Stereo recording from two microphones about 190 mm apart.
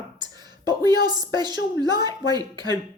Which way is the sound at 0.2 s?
20° right (ahead or behind).